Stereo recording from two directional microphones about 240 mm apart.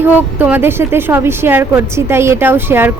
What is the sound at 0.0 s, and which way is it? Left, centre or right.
Speech, centre.